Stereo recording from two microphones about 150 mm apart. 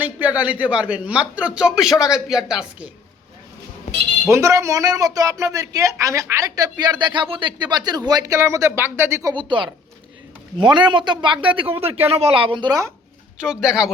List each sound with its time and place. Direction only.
0.0 s a man's voice: 10° right (ahead or behind)
4.3 s a man's voice: 20° right (ahead or behind)
9.3 s speech: 30° right (ahead or behind)
13.4 s a woman's voice: 5° right (ahead or behind)